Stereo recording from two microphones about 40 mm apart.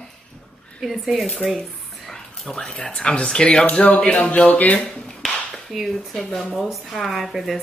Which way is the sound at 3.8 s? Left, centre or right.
Left.